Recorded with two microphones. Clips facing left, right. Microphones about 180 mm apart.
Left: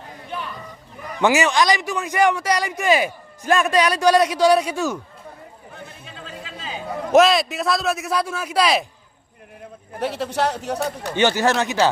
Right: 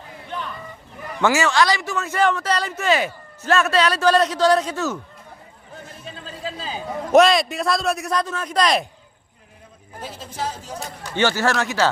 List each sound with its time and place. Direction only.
0.3 s a sound: 10° left (ahead or behind)
1.2 s speech: 20° left (ahead or behind)
6.2 s a sound: 35° right (ahead or behind)
7.1 s a man's voice: centre (ahead or behind)
10.0 s speech: 70° left (ahead or behind)
11.1 s speech: 20° left (ahead or behind)